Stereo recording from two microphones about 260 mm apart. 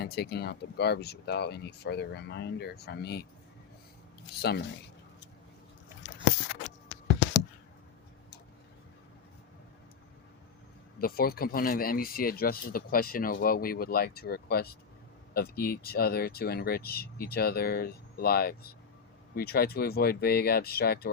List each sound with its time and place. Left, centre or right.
0.0 s speech: left
4.4 s speech: left
11.0 s speech: left